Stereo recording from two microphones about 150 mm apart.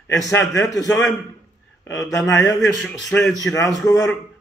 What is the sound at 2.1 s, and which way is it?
Speech, 20° left (ahead or behind).